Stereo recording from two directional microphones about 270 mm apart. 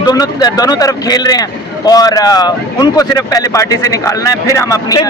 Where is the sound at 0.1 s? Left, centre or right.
Centre.